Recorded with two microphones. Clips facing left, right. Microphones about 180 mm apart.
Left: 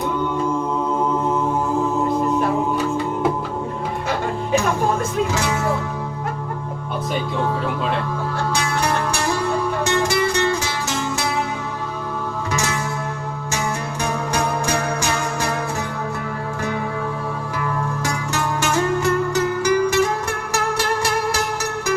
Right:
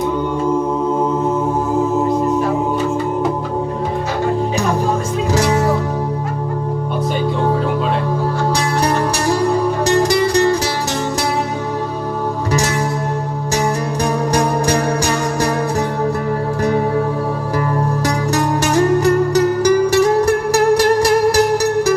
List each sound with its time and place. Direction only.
5.3 s music: 35° right (ahead or behind)
8.5 s music: 35° right (ahead or behind)
14.0 s music: 35° right (ahead or behind)
18.0 s music: 35° right (ahead or behind)